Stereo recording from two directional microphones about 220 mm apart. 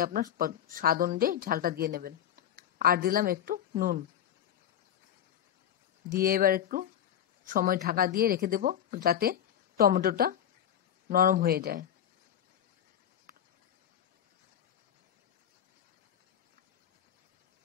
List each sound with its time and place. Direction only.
0.0 s speech: 40° right (ahead or behind)
6.0 s speech: 40° right (ahead or behind)
13.3 s a sound: 40° right (ahead or behind)